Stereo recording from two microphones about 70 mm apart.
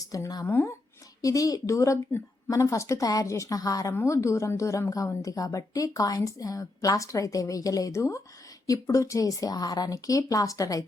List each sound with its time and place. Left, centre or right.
0.0 s a woman's voice: left
0.4 s speech: left
1.2 s a woman's voice: left
3.9 s a woman's voice: left